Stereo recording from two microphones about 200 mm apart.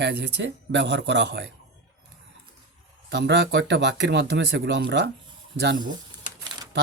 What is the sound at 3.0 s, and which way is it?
Speech, 60° right (ahead or behind).